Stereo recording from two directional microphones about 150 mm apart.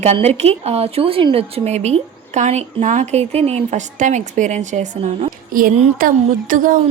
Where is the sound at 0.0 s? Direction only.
50° right (ahead or behind).